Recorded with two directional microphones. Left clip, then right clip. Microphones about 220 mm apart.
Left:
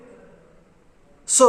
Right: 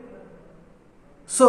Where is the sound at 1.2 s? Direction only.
45° left (ahead or behind).